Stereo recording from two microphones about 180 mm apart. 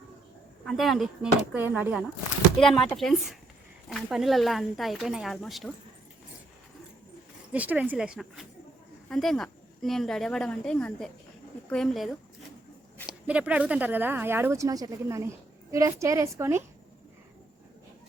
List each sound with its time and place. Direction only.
0.6 s speech: centre (ahead or behind)
7.5 s a woman's voice: 10° right (ahead or behind)